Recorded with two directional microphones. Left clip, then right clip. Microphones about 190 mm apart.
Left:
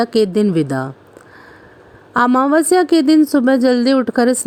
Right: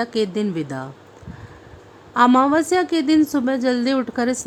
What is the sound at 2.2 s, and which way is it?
Speech, 30° left (ahead or behind).